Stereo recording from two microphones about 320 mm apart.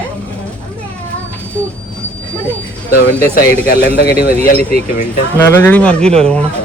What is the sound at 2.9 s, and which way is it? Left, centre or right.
Speech, left.